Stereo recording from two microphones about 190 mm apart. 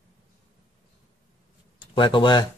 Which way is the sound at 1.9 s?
25° left (ahead or behind).